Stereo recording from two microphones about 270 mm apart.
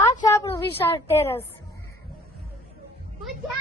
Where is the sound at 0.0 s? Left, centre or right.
Centre.